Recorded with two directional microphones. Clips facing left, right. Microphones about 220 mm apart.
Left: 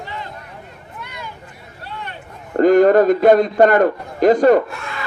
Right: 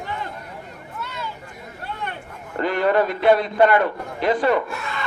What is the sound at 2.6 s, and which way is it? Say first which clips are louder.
A man's voice: left 9 dB; 45° left (ahead or behind).